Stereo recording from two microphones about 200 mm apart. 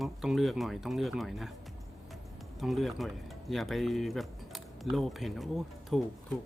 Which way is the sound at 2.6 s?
Centre (ahead or behind).